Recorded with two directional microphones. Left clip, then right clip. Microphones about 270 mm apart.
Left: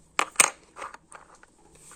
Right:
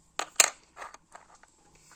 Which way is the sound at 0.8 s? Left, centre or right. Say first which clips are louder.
Left 5 dB; left.